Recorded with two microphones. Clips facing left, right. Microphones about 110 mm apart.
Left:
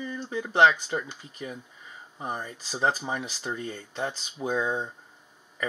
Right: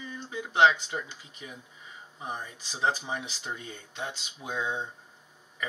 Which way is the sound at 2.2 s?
40° left (ahead or behind).